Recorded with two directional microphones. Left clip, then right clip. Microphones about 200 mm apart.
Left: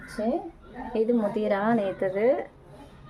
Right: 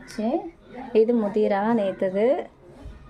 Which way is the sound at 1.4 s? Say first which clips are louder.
Right 3 dB; 10° right (ahead or behind).